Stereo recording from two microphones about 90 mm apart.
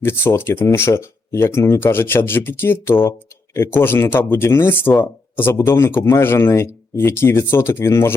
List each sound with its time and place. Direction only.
0.0 s speech: 25° left (ahead or behind)